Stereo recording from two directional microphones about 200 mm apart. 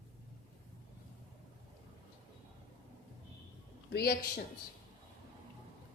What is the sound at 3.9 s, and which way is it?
Speech, 50° left (ahead or behind).